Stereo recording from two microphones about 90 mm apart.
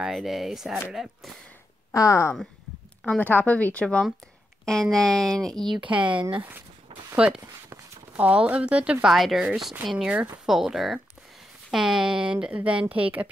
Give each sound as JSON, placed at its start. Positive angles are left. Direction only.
{"t": 0.1, "sound": "speech", "side_deg": 0}
{"t": 2.0, "sound": "speech", "side_deg": 35}
{"t": 3.2, "sound": "speech", "side_deg": 20}
{"t": 5.9, "sound": "speech", "side_deg": -15}
{"t": 7.2, "sound": "speech", "side_deg": -10}
{"t": 7.4, "sound": "speech", "side_deg": -20}
{"t": 9.0, "sound": "speech", "side_deg": -5}